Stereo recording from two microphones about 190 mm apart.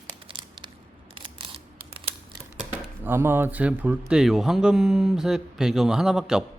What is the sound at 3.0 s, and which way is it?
Speech, 10° right (ahead or behind).